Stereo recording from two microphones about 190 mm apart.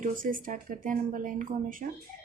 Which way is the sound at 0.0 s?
45° right (ahead or behind).